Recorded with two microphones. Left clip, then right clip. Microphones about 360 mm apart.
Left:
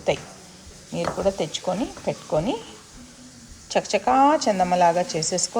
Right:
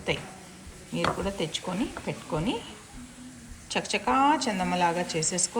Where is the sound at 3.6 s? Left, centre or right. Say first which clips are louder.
Left 6 dB; centre.